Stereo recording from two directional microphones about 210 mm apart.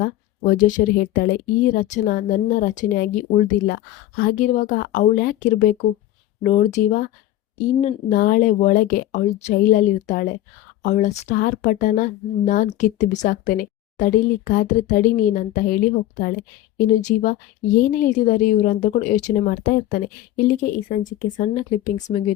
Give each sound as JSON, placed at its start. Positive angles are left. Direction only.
{"t": 0.0, "sound": "a woman's voice", "side_deg": 40}